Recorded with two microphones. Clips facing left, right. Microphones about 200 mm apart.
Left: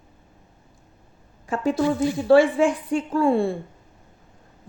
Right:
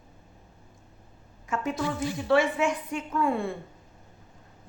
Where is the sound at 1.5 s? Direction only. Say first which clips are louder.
Left 8 dB; 30° left (ahead or behind).